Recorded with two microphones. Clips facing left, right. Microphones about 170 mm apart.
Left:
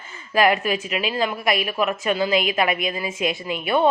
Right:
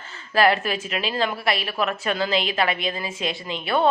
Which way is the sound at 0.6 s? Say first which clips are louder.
Left 3 dB; 40° right (ahead or behind).